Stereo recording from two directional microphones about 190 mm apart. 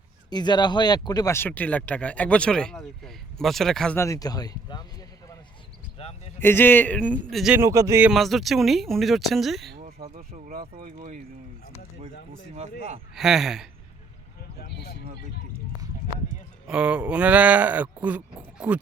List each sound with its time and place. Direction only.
0.3 s speech: 20° left (ahead or behind)
6.0 s a sound: 35° left (ahead or behind)
6.4 s speech: 10° left (ahead or behind)
7.6 s speech: 15° right (ahead or behind)
8.1 s speech: centre (ahead or behind)
9.7 s a sound: 50° right (ahead or behind)
13.1 s speech: centre (ahead or behind)
16.6 s speech: 5° right (ahead or behind)